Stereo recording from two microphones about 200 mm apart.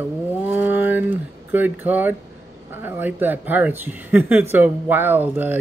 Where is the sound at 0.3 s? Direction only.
10° right (ahead or behind).